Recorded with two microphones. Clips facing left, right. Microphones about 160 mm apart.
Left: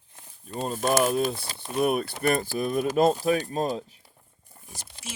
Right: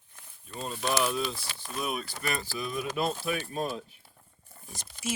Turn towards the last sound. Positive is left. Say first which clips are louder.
# left 2 dB
turn(degrees=10)  # may be behind; listen again after turning